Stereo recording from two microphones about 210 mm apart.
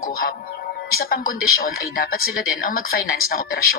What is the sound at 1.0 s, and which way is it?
A woman's voice, 45° left (ahead or behind).